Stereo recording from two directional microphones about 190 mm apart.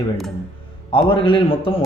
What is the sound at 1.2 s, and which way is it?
Speech, 30° left (ahead or behind).